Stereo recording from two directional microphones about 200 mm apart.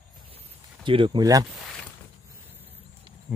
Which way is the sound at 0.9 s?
25° right (ahead or behind).